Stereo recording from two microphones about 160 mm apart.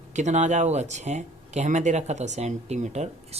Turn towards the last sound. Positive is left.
turn(degrees=-45)  # may be behind; listen again after turning